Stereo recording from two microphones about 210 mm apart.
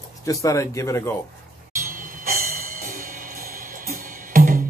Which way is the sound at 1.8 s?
40° right (ahead or behind).